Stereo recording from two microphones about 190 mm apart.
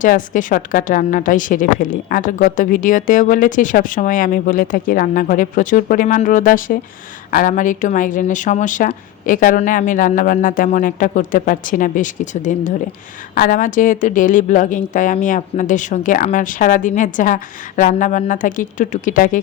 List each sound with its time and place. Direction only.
0.0 s a woman's voice: 45° left (ahead or behind)